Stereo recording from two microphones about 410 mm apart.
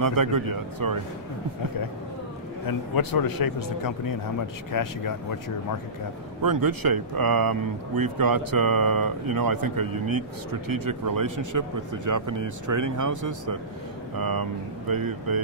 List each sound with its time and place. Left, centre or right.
0.0 s speech: right
2.6 s speech: left
6.4 s speech: right
14.1 s speech: right